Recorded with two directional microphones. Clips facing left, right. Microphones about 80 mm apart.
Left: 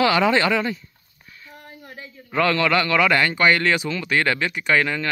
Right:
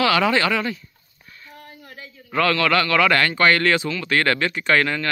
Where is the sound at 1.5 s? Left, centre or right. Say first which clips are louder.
Left 1 dB; left.